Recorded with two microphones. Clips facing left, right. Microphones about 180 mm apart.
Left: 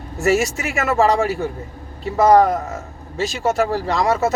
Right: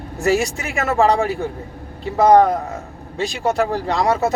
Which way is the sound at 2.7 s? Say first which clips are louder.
Even; 15° right (ahead or behind).